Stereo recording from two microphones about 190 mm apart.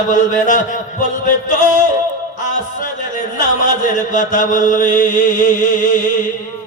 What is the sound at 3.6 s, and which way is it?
A man's voice, 40° left (ahead or behind).